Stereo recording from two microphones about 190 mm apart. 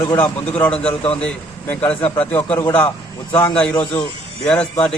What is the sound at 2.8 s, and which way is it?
Speech, 25° left (ahead or behind).